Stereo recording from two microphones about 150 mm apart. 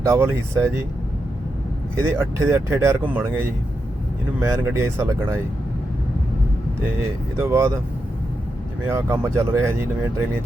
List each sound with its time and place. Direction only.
0.0 s speech: 20° right (ahead or behind)
2.0 s speech: 20° right (ahead or behind)
4.4 s speech: 15° right (ahead or behind)
7.3 s speech: 15° right (ahead or behind)
8.9 s speech: 15° right (ahead or behind)